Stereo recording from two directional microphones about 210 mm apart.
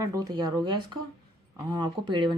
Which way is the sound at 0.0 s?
15° right (ahead or behind).